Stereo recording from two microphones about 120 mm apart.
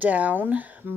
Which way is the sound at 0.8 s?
20° right (ahead or behind).